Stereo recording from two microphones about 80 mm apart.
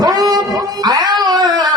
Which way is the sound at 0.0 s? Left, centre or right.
Right.